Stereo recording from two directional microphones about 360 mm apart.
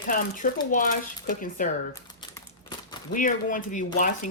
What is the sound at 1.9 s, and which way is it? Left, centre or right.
Speech, centre.